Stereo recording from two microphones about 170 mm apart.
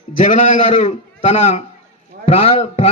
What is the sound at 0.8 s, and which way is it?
Speech, 40° left (ahead or behind).